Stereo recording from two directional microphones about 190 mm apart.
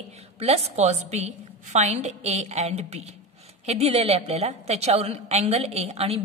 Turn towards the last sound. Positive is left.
turn(degrees=-35)  # may be behind; listen again after turning